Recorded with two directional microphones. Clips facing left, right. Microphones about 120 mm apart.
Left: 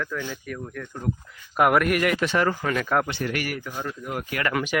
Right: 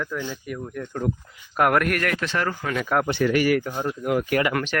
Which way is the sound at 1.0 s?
90° right.